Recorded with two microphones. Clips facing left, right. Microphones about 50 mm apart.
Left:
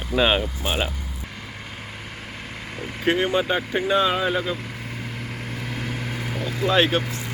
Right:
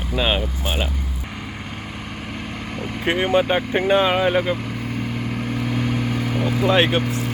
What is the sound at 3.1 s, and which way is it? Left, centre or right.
Speech, right.